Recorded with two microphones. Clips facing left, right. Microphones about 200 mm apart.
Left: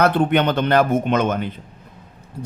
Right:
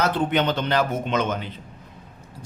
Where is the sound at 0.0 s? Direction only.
60° left (ahead or behind).